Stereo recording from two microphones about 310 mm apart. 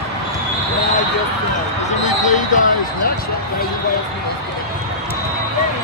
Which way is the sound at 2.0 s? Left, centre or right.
Left.